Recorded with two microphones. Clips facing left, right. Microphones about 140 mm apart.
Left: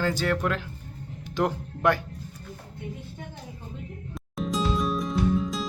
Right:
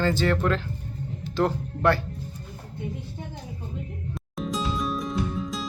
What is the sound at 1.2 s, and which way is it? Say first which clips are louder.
Music: right 2 dB; 15° left (ahead or behind).